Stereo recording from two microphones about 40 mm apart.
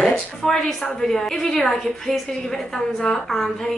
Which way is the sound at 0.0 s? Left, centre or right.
Centre.